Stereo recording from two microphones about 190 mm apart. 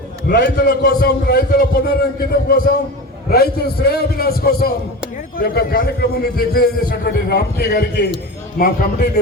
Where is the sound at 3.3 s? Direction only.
55° left (ahead or behind).